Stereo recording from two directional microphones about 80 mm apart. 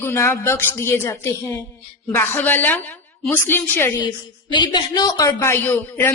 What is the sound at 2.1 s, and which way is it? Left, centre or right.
A woman's voice, left.